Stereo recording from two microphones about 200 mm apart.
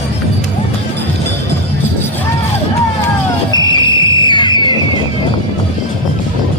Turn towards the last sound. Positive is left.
turn(degrees=20)  # may be behind; listen again after turning